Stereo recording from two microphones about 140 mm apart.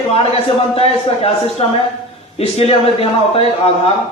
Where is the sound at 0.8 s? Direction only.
45° left (ahead or behind).